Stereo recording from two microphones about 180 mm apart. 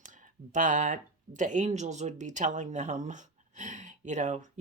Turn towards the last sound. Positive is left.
turn(degrees=-40)  # may be behind; listen again after turning